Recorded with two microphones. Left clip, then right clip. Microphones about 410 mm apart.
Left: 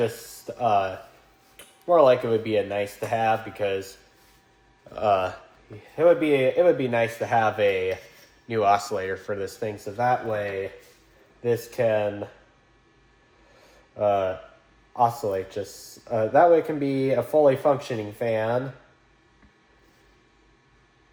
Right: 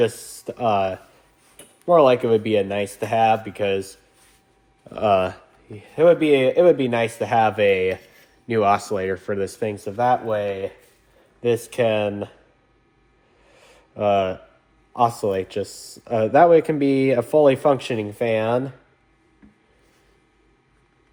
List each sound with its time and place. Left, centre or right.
0.0 s speech: centre
4.9 s a man's voice: centre
11.8 s speech: centre
14.0 s speech: centre